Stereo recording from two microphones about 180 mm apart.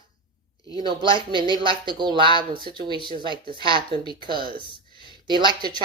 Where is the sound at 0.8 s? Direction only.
25° right (ahead or behind).